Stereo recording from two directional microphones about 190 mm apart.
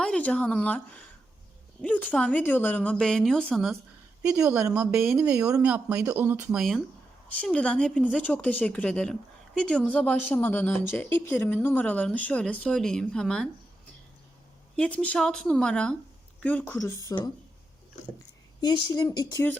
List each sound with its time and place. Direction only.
0.0 s speech: 5° left (ahead or behind)
4.2 s speech: 10° right (ahead or behind)
14.8 s speech: 5° left (ahead or behind)
18.6 s speech: 25° left (ahead or behind)